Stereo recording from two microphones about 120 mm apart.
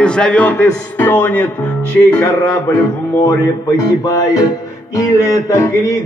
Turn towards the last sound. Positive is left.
turn(degrees=25)  # may be behind; listen again after turning